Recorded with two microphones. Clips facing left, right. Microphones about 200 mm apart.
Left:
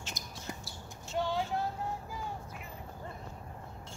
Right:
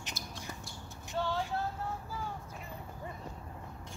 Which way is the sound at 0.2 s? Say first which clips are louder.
Left 1 dB; 20° left (ahead or behind).